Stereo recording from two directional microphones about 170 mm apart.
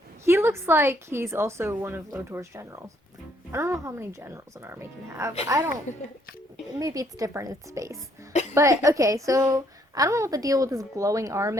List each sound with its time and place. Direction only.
0.3 s a woman's voice: 15° right (ahead or behind)
8.3 s a sound: 45° left (ahead or behind)
8.5 s a woman's voice: 20° right (ahead or behind)